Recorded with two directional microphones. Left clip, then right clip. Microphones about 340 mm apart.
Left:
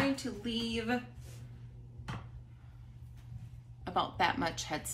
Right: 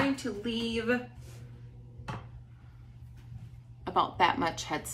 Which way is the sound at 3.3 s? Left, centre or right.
Centre.